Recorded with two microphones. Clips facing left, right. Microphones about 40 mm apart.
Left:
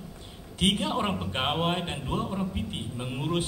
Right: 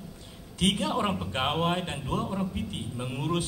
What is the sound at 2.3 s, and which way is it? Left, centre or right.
Speech, centre.